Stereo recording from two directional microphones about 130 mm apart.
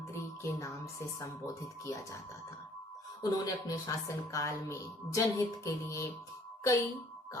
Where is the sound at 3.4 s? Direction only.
25° left (ahead or behind).